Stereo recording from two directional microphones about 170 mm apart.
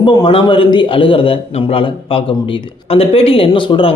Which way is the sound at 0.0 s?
25° left (ahead or behind).